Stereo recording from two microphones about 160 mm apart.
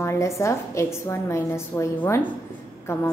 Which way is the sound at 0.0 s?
15° left (ahead or behind).